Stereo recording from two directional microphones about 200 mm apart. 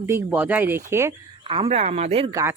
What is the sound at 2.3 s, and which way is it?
Speech, 15° right (ahead or behind).